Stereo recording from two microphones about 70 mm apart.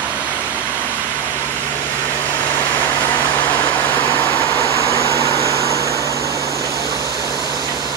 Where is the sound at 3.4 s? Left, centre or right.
Left.